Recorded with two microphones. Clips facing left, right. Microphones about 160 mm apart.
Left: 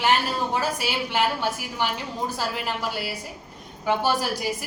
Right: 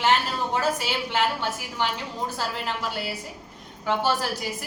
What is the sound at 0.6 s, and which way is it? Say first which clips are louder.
Speech: right 1 dB; 10° left (ahead or behind).